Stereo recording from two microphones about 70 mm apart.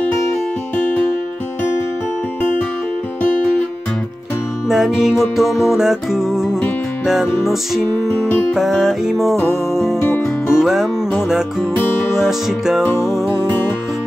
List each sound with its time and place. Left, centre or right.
4.6 s music: centre
8.5 s music: centre
9.9 s music: left
10.6 s music: centre
12.2 s music: centre